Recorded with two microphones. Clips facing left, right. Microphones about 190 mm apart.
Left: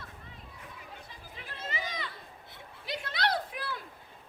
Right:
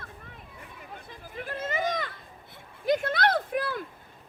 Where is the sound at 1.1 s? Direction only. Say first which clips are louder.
Right 10 dB; 50° right (ahead or behind).